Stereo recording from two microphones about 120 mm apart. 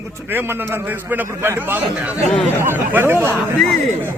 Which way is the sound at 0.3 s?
15° right (ahead or behind).